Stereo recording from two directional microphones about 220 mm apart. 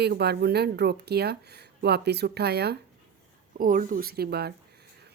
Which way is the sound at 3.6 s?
35° right (ahead or behind).